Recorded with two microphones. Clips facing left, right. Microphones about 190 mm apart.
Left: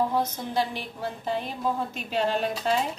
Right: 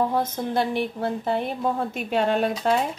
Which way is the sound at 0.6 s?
60° right (ahead or behind).